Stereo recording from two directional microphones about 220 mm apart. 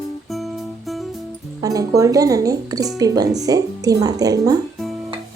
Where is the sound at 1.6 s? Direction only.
15° right (ahead or behind).